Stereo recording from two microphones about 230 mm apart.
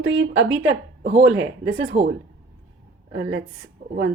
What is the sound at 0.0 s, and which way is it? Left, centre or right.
A woman's voice, right.